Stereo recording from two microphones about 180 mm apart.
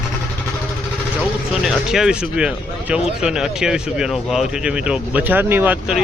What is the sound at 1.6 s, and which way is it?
Speech, centre (ahead or behind).